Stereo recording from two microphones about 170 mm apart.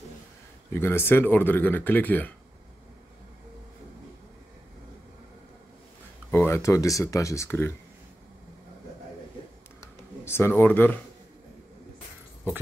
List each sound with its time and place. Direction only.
0.7 s speech: 15° left (ahead or behind)
6.3 s speech: 15° left (ahead or behind)
10.2 s speech: 15° left (ahead or behind)